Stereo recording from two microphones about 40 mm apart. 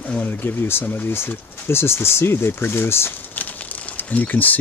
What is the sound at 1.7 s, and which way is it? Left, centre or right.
Speech, left.